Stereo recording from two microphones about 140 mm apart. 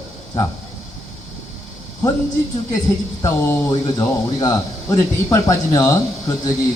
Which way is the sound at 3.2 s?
25° left (ahead or behind).